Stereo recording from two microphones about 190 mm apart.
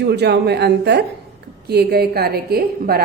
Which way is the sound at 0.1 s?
60° right (ahead or behind).